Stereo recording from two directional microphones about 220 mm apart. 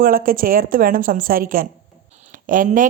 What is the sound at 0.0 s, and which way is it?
Speech, 40° right (ahead or behind).